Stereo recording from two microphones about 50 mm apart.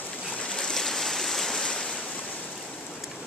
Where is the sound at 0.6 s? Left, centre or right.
Centre.